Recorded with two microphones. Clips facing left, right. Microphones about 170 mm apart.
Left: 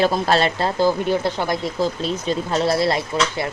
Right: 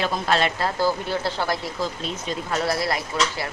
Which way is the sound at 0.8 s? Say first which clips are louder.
Left 7 dB; 20° left (ahead or behind).